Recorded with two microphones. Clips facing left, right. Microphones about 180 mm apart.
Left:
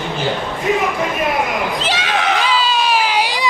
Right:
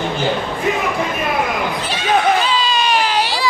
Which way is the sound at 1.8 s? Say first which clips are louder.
Left 1 dB; 90° left.